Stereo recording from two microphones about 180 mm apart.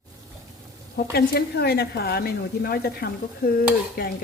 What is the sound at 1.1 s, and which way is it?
A woman's voice, 60° left (ahead or behind).